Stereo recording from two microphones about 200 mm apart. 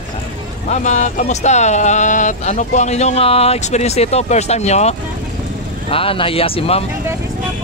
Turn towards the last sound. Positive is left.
turn(degrees=30)  # may be behind; listen again after turning